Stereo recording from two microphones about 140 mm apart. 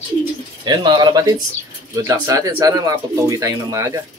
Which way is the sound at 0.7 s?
30° right (ahead or behind).